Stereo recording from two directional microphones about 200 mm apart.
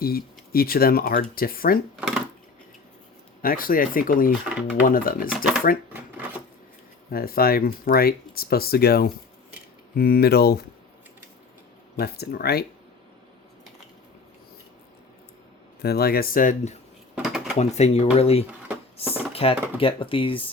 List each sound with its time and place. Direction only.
0.0 s speech: 50° left (ahead or behind)
2.0 s dishes: 5° right (ahead or behind)
3.4 s speech: 45° left (ahead or behind)
7.1 s speech: 50° left (ahead or behind)
11.9 s speech: 50° left (ahead or behind)
15.8 s speech: 50° left (ahead or behind)
17.2 s a sound: centre (ahead or behind)
17.6 s speech: 35° left (ahead or behind)
19.0 s a sound: 10° right (ahead or behind)
19.3 s drawer open or close: 30° left (ahead or behind)
19.8 s speech: 25° left (ahead or behind)